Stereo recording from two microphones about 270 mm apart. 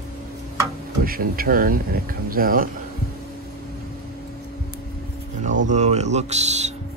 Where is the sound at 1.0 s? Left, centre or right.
Right.